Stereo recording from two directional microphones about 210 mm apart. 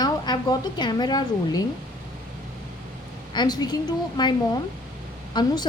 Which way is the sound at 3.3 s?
20° left (ahead or behind).